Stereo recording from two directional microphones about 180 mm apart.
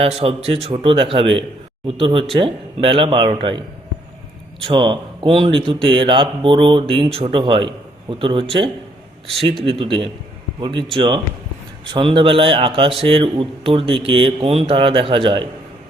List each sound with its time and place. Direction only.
0.0 s speech: 30° right (ahead or behind)
4.6 s speech: 25° right (ahead or behind)
9.6 s speech: 30° right (ahead or behind)